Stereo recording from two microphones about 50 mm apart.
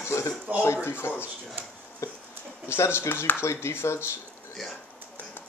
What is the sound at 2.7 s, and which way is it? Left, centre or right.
Speech, left.